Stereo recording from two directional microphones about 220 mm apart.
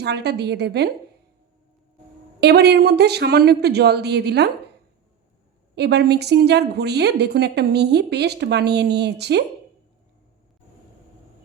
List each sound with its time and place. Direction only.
0.0 s a woman's voice: 50° right (ahead or behind)
2.4 s a woman's voice: 50° right (ahead or behind)
5.7 s a woman's voice: 50° right (ahead or behind)